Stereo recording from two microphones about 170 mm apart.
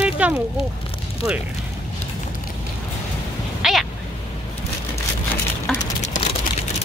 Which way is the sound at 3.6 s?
Centre (ahead or behind).